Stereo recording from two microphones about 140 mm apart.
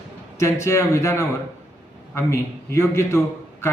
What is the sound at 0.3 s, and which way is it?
A man's voice, 20° left (ahead or behind).